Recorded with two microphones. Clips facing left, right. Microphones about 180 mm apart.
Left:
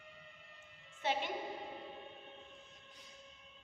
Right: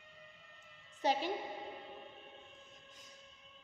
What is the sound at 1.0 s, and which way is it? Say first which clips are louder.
Female singing: right 3 dB; 40° right (ahead or behind).